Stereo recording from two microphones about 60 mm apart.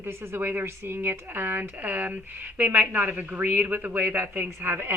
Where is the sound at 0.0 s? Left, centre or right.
Right.